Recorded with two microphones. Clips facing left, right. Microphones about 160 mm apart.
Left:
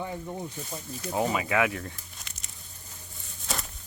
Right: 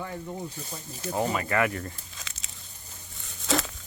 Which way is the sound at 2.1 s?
90° right.